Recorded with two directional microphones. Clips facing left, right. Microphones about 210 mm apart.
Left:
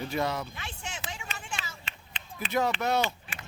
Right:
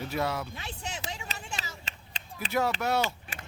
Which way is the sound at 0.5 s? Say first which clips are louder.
Right 2 dB; 35° right (ahead or behind).